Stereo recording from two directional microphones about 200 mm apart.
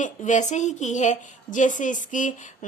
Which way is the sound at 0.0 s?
40° left (ahead or behind).